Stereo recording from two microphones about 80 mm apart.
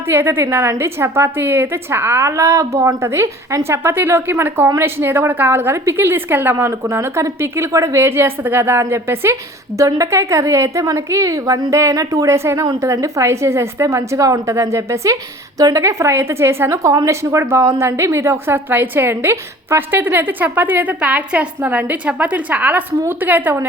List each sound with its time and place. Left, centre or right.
0.1 s a woman's voice: right